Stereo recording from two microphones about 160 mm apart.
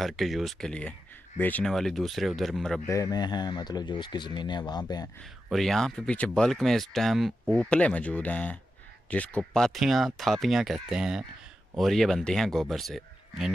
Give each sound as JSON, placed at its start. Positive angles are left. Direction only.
{"t": 0.0, "sound": "speech", "side_deg": 0}
{"t": 2.9, "sound": "speech", "side_deg": 20}
{"t": 5.2, "sound": "speech", "side_deg": 0}